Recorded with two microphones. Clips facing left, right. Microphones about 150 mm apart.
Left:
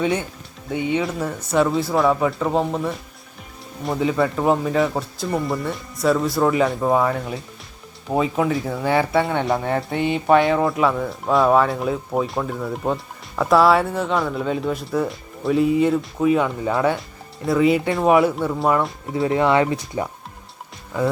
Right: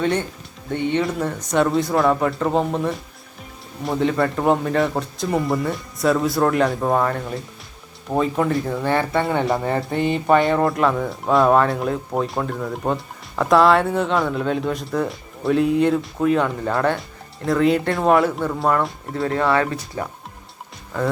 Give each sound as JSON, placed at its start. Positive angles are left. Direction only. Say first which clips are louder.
{"t": 0.0, "sound": "speech", "louder": "right 1 dB", "side_deg": 10}
{"t": 9.2, "sound": "speech", "louder": "right 1 dB", "side_deg": 0}
{"t": 19.3, "sound": "speech", "louder": "left 2 dB", "side_deg": 15}